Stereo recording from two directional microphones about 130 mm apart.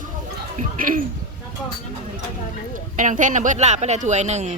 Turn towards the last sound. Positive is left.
turn(degrees=-60)  # may be behind; listen again after turning